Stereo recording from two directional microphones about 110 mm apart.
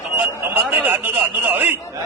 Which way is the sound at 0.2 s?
20° right (ahead or behind).